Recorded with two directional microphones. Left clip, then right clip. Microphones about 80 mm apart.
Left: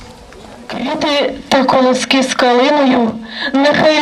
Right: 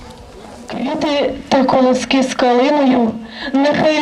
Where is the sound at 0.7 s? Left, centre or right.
Left.